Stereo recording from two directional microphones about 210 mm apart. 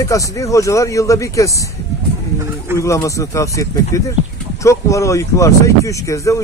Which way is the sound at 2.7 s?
15° left (ahead or behind).